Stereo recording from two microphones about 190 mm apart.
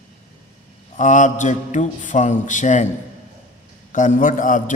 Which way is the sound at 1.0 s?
40° left (ahead or behind).